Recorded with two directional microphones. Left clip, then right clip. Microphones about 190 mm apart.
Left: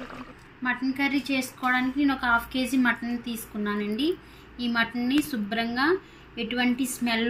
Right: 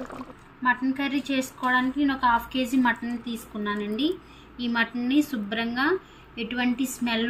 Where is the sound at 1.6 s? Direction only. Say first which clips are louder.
Right 1 dB; 10° left (ahead or behind).